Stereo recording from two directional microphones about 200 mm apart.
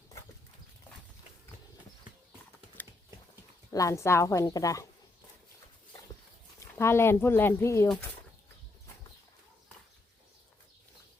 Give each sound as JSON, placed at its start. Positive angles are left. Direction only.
{"t": 3.7, "sound": "speech", "side_deg": 15}
{"t": 6.6, "sound": "speech", "side_deg": 15}